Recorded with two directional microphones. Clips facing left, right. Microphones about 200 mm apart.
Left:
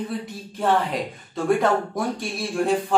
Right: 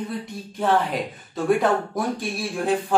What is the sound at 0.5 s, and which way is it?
A man's voice, centre (ahead or behind).